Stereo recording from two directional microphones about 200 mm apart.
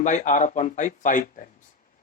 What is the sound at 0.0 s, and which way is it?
Speech, 40° left (ahead or behind).